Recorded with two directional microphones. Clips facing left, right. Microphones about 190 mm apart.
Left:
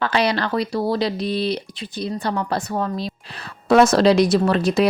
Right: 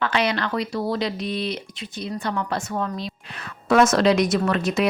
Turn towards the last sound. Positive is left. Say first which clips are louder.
# left 4 dB
turn(degrees=35)  # may be behind; listen again after turning